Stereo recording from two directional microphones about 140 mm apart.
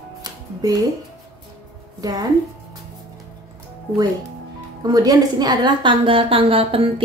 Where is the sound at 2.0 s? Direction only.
25° right (ahead or behind).